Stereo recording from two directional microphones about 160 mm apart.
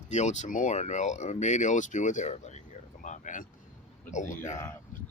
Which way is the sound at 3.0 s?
50° left (ahead or behind).